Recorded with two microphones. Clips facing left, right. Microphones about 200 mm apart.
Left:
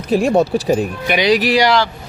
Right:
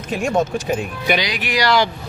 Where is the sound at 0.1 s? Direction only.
35° left (ahead or behind).